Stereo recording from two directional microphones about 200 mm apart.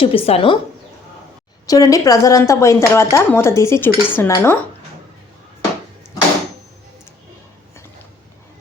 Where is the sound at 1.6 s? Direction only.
15° left (ahead or behind).